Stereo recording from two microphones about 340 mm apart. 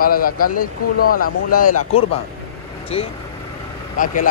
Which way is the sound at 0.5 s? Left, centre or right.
Left.